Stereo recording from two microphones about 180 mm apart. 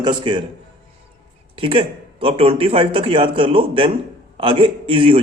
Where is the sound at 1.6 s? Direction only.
30° right (ahead or behind).